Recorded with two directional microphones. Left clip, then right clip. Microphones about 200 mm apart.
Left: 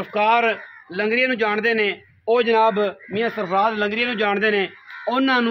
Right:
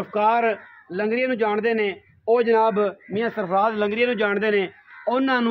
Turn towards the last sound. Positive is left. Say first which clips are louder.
# left 2 dB
turn(degrees=-40)  # may be behind; listen again after turning